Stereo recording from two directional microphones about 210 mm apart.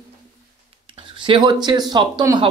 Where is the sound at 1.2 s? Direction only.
20° right (ahead or behind).